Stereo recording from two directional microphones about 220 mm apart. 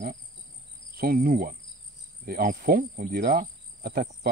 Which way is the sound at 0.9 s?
40° right (ahead or behind).